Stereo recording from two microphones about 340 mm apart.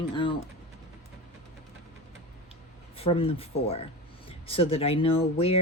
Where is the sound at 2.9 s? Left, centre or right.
Centre.